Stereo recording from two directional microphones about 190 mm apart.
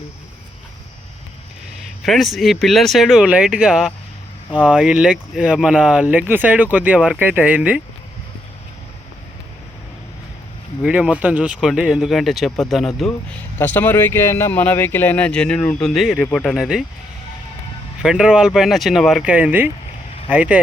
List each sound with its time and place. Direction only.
2.0 s speech: centre (ahead or behind)
10.8 s speech: 5° right (ahead or behind)
18.0 s speech: 5° right (ahead or behind)